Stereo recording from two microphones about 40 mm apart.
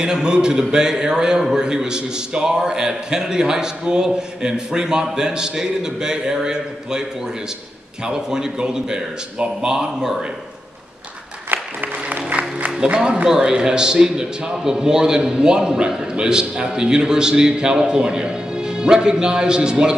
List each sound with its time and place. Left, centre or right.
0.0 s a man's voice: centre
11.5 s music: right
12.7 s a man's voice: right